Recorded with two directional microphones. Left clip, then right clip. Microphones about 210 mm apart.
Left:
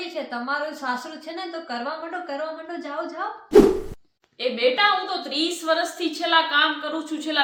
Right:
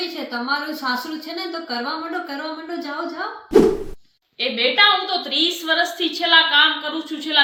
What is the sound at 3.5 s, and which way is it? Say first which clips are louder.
Plop: even; centre (ahead or behind).